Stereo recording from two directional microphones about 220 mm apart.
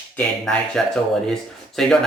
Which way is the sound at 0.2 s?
5° left (ahead or behind).